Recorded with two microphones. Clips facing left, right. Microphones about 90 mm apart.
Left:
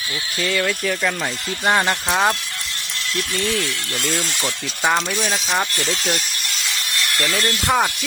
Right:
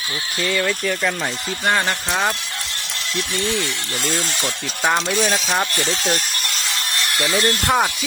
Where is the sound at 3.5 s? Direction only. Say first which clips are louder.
Even; 30° right (ahead or behind).